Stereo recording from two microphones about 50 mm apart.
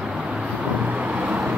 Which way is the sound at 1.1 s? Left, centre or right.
Right.